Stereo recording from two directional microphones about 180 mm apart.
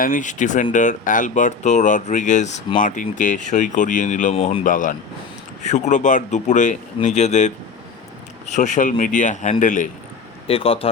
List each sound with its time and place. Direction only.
0.0 s speech: 45° left (ahead or behind)
10.4 s speech: 30° left (ahead or behind)